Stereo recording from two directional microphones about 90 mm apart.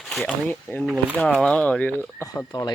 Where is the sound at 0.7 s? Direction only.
20° left (ahead or behind).